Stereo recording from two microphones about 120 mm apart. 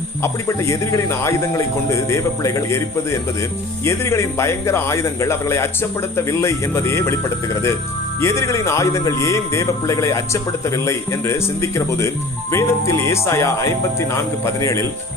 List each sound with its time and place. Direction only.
0.2 s a man's voice: 25° left (ahead or behind)
8.2 s a man's voice: 25° left (ahead or behind)